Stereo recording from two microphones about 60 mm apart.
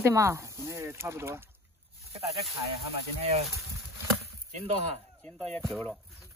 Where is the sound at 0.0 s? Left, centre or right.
Right.